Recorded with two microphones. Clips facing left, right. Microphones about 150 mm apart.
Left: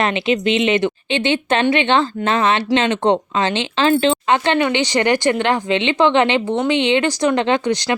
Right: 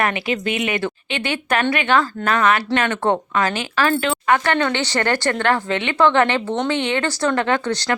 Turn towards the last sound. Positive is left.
turn(degrees=15)  # may be behind; listen again after turning